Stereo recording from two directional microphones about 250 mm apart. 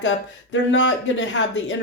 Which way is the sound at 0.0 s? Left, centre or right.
Left.